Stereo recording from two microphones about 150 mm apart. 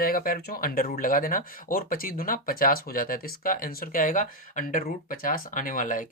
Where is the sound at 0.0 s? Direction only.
70° left (ahead or behind).